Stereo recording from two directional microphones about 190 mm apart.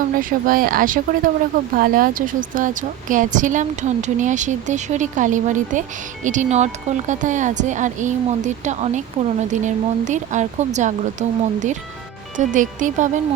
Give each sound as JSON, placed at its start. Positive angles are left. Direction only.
{"t": 0.2, "sound": "a woman's voice", "side_deg": -45}